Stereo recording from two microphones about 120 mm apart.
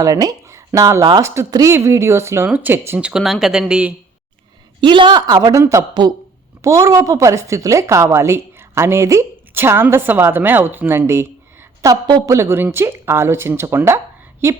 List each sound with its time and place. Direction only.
0.0 s a woman's voice: 30° right (ahead or behind)
3.0 s speech: 5° right (ahead or behind)
4.8 s a man's voice: 40° right (ahead or behind); by 14.0 s 20° right (ahead or behind)